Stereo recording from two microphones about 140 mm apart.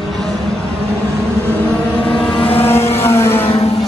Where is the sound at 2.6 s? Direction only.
15° left (ahead or behind).